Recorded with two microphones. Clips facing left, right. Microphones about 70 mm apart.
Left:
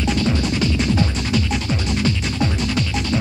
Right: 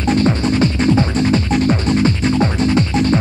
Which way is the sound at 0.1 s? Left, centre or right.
Right.